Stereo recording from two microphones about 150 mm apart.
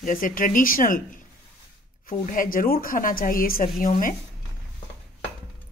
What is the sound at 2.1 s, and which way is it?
Speech, 65° left (ahead or behind).